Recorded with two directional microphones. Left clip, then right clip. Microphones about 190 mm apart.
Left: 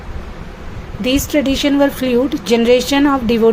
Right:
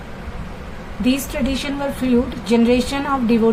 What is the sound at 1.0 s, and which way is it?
A woman's voice, 40° left (ahead or behind).